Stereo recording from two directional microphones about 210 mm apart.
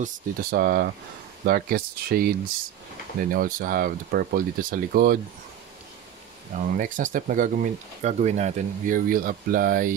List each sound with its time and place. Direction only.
0.0 s speech: 45° right (ahead or behind)
6.6 s speech: 40° right (ahead or behind)